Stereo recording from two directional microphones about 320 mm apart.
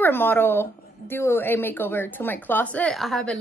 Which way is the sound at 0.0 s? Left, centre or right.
Centre.